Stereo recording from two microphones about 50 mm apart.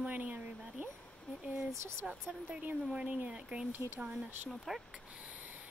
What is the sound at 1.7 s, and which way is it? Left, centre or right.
Speech, right.